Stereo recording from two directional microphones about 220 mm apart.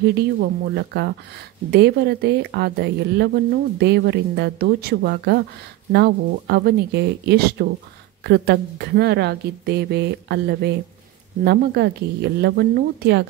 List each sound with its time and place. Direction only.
0.0 s speech: 50° right (ahead or behind)